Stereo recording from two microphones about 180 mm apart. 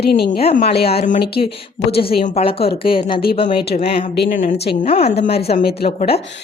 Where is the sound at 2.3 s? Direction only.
35° left (ahead or behind).